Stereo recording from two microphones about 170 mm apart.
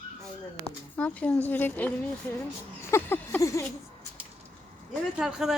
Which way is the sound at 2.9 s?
15° left (ahead or behind).